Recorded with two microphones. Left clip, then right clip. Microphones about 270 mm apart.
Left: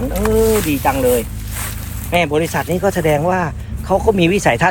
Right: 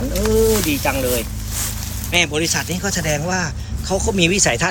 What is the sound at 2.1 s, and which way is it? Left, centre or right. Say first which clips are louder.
Speech: left 2 dB; left.